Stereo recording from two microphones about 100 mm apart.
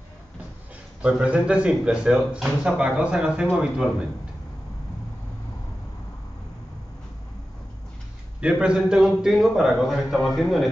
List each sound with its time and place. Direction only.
1.0 s speech: 10° right (ahead or behind)
8.4 s a man's voice: 10° right (ahead or behind)